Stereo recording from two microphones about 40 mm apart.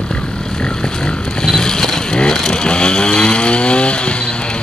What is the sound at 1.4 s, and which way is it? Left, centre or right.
Vehicle, centre.